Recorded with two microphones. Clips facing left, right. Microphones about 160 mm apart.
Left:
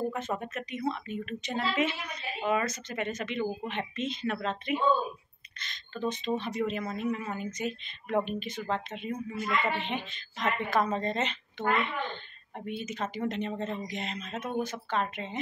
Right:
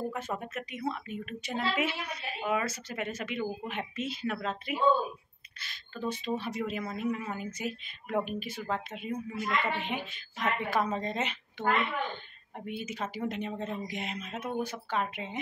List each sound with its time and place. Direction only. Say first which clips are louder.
0.1 s a woman's voice: left 2 dB; 5° right (ahead or behind)